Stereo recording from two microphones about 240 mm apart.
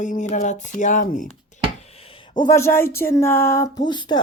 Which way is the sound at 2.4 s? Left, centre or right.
Centre.